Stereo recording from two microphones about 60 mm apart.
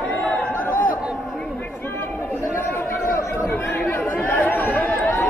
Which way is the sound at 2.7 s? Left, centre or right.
Left.